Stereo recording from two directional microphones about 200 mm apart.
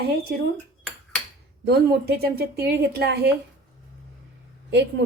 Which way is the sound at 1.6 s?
50° right (ahead or behind).